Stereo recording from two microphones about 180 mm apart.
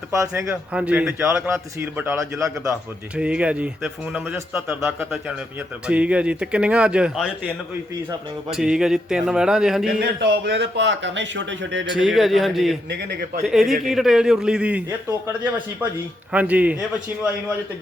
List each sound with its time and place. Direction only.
0.1 s a man's voice: 15° right (ahead or behind)
10.0 s speech: 75° right (ahead or behind); by 11.9 s 90° right
11.9 s a man's voice: centre (ahead or behind)
12.9 s a man's voice: 65° right (ahead or behind)
13.4 s a man's voice: centre (ahead or behind)